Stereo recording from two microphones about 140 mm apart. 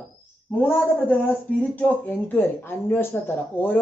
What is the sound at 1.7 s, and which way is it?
Speech, 10° left (ahead or behind).